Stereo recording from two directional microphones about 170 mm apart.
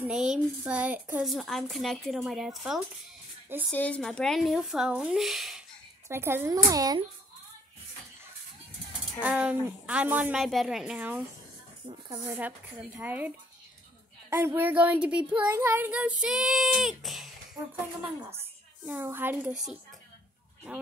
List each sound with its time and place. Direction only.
0.0 s speech: 5° right (ahead or behind)
3.7 s speech: 10° left (ahead or behind)
6.0 s speech: 15° right (ahead or behind)
9.2 s speech: 10° right (ahead or behind)
14.3 s speech: 15° right (ahead or behind)
18.9 s speech: 10° right (ahead or behind)